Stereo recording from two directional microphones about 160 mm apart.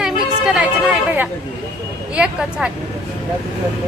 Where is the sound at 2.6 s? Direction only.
5° right (ahead or behind).